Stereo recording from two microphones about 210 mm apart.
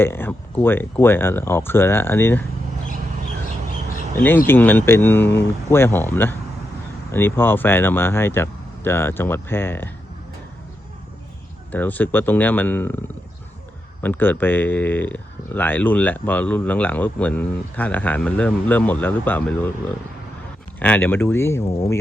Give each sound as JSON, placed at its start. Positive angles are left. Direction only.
{"t": 0.0, "sound": "speech", "side_deg": 10}
{"t": 4.4, "sound": "speech", "side_deg": 10}
{"t": 11.7, "sound": "speech", "side_deg": 10}
{"t": 20.7, "sound": "speech", "side_deg": 10}